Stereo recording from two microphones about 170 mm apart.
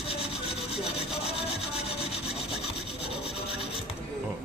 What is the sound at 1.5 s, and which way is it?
Rub, 35° left (ahead or behind).